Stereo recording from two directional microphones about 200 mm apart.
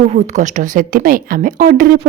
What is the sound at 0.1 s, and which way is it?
Speech, 35° right (ahead or behind).